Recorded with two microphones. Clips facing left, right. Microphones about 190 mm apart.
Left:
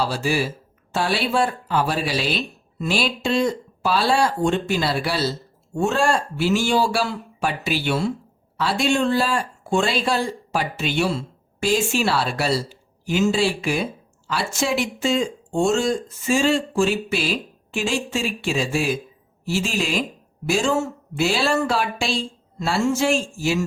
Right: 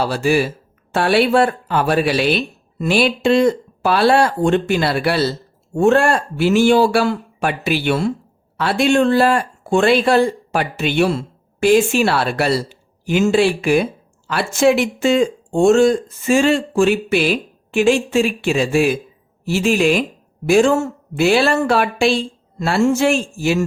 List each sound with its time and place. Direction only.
0.0 s speech: 60° right (ahead or behind)